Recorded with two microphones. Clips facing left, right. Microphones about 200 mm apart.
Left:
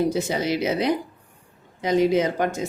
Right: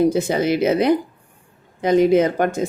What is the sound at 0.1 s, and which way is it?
Speech, 55° right (ahead or behind).